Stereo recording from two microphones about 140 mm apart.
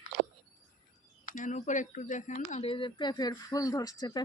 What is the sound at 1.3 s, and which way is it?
Speech, 70° left (ahead or behind).